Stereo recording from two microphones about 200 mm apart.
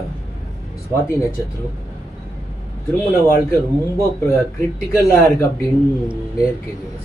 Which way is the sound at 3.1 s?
10° left (ahead or behind).